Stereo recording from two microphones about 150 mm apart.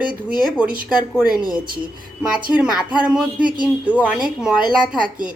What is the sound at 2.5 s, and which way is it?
A woman's voice, 5° right (ahead or behind).